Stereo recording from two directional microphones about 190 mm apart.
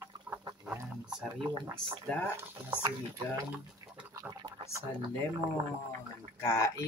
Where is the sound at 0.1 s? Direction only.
20° right (ahead or behind).